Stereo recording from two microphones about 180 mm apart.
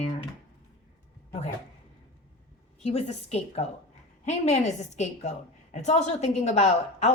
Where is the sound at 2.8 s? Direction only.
35° left (ahead or behind).